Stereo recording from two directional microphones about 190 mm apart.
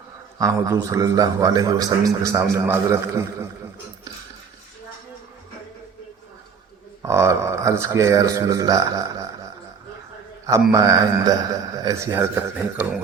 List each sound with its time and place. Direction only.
0.3 s a man's voice: 15° right (ahead or behind)
7.0 s a man's voice: 15° right (ahead or behind)
10.7 s a man's voice: 20° right (ahead or behind)